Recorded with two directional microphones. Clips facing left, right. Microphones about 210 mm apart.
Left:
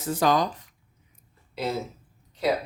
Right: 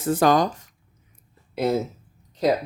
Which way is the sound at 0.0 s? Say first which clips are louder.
Right 4 dB; 50° right (ahead or behind).